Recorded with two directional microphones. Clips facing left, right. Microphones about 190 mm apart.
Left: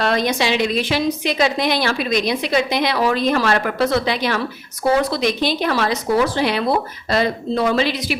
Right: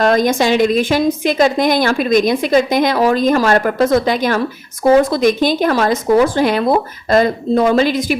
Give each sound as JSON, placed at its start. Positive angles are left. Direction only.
{"t": 0.0, "sound": "a woman's voice", "side_deg": -45}